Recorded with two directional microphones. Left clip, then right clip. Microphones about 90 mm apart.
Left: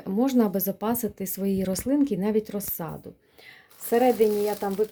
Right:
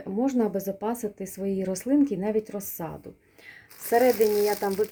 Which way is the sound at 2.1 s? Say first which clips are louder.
Left 1 dB; 15° left (ahead or behind).